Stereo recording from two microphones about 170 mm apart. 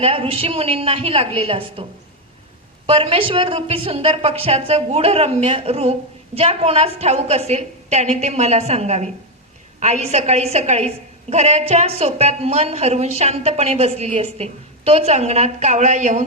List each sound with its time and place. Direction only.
0.0 s a woman's voice: 35° right (ahead or behind)